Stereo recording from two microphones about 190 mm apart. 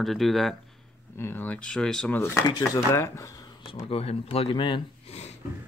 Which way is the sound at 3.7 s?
30° left (ahead or behind).